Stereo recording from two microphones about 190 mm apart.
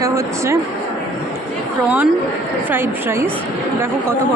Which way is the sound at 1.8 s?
10° right (ahead or behind).